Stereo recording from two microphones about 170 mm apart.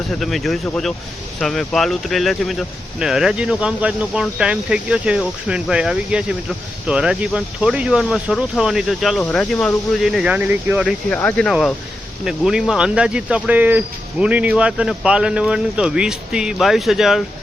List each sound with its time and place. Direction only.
0.1 s speech: centre (ahead or behind)
11.1 s speech: 10° left (ahead or behind)
12.2 s speech: 5° right (ahead or behind)